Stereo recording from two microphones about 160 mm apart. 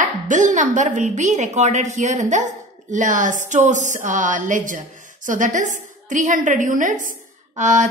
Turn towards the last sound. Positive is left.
turn(degrees=-50)  # may be behind; listen again after turning